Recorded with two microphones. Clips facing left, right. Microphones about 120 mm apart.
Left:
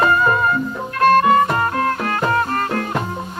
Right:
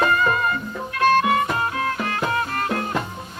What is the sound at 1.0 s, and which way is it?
Music, 50° left (ahead or behind).